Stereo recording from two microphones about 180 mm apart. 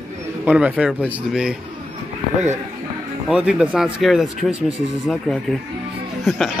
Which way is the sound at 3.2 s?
5° right (ahead or behind).